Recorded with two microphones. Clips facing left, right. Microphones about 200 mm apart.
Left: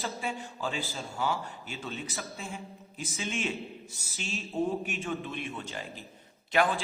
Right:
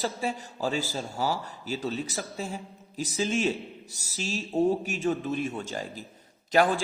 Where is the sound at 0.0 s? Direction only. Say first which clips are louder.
Right 5 dB; 40° right (ahead or behind).